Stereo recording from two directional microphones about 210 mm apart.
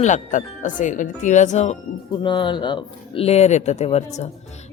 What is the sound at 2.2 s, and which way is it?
Speech, 20° left (ahead or behind).